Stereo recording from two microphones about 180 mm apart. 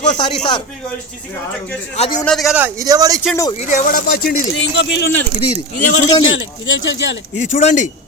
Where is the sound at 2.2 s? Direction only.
Centre (ahead or behind); by 3.2 s 20° right (ahead or behind).